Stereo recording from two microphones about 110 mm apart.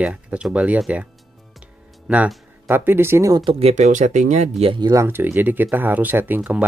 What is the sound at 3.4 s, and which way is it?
Speech, 60° right (ahead or behind).